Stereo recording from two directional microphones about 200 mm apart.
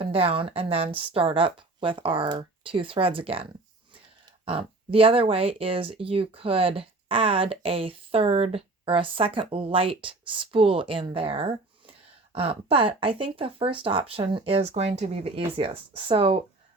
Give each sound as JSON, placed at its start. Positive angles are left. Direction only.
{"t": 0.0, "sound": "speech", "side_deg": -30}
{"t": 4.4, "sound": "speech", "side_deg": -30}